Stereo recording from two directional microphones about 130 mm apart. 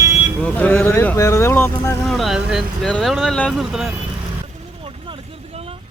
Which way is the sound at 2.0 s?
Centre (ahead or behind).